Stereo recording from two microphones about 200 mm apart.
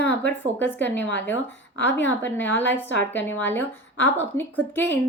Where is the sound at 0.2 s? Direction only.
10° left (ahead or behind).